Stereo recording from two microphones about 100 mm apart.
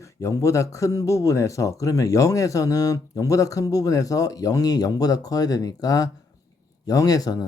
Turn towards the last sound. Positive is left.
turn(degrees=40)  # may be behind; listen again after turning